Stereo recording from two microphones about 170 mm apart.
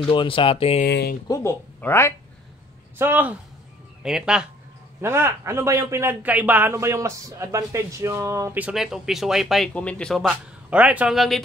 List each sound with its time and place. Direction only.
0.1 s speech: 30° left (ahead or behind)
0.8 s speech: 70° left (ahead or behind)
1.2 s speech: 20° left (ahead or behind)
3.0 s a man's voice: 10° right (ahead or behind)
5.0 s a man's voice: 15° right (ahead or behind)